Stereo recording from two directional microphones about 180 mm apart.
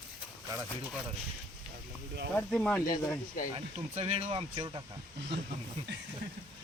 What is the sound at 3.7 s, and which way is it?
Speech, 35° right (ahead or behind).